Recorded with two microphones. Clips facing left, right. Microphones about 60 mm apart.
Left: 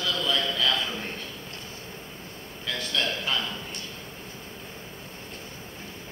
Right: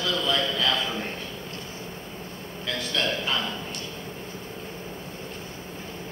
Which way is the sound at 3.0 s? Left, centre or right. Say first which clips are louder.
Right 2 dB; centre.